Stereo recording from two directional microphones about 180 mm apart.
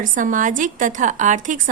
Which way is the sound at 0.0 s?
45° right (ahead or behind).